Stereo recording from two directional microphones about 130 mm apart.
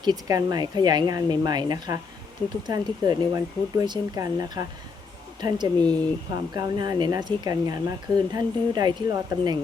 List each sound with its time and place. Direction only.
0.0 s speech: 30° right (ahead or behind)